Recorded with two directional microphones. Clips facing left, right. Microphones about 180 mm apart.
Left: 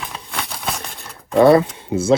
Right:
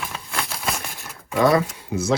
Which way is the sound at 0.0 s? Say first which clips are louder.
Left 1 dB; centre (ahead or behind).